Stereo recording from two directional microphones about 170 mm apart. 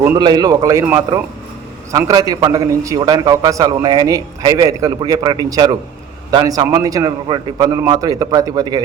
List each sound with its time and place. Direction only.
0.2 s a man's voice: 25° right (ahead or behind)
1.9 s a man's voice: 20° right (ahead or behind)